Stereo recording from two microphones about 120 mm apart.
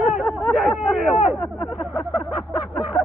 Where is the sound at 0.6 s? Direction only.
5° right (ahead or behind).